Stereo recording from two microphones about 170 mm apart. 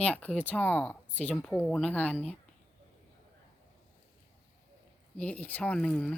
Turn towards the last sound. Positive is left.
turn(degrees=5)  # may be behind; listen again after turning